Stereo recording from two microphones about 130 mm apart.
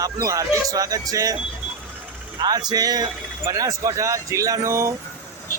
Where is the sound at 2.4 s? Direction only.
30° right (ahead or behind).